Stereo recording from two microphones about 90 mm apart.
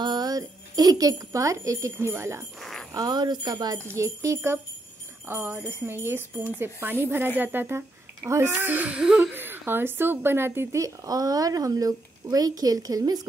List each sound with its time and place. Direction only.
0.0 s speech: 50° right (ahead or behind); by 2.4 s 30° right (ahead or behind)
2.6 s jingle bell: centre (ahead or behind)
2.9 s speech: 45° right (ahead or behind)
3.9 s a woman's voice: 35° right (ahead or behind); by 9.2 s 10° right (ahead or behind)
9.3 s a woman's voice: 25° right (ahead or behind); by 13.2 s 45° right (ahead or behind)